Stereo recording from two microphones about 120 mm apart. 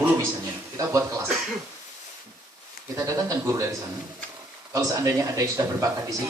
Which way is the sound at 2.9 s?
25° right (ahead or behind).